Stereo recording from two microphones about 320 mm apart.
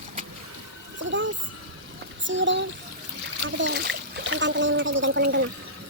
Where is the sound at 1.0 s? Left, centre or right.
Right.